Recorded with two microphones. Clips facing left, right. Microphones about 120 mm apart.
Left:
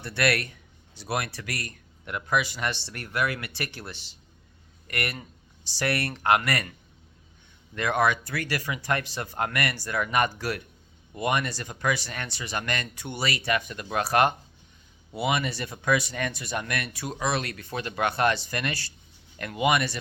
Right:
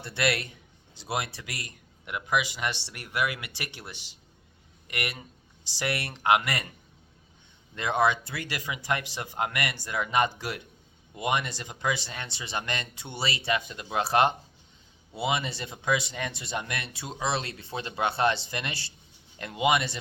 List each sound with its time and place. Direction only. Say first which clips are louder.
0.0 s speech: left 2 dB; 20° right (ahead or behind)
7.8 s speech: left 1 dB; 20° right (ahead or behind)